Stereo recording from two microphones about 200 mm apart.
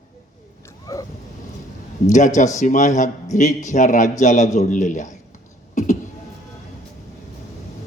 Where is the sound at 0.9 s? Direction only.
15° left (ahead or behind).